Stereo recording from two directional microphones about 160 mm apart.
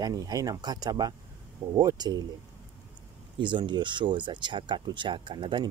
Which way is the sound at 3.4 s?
30° right (ahead or behind).